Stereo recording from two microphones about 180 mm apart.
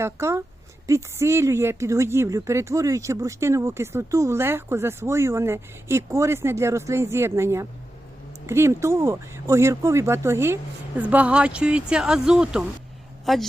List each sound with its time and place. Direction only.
0.0 s a woman's voice: 15° right (ahead or behind); by 13.4 s centre (ahead or behind)